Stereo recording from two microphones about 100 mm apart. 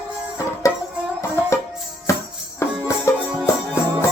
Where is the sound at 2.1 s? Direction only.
30° left (ahead or behind).